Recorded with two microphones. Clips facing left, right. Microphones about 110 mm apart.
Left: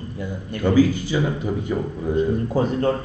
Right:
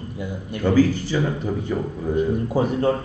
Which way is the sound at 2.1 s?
15° right (ahead or behind).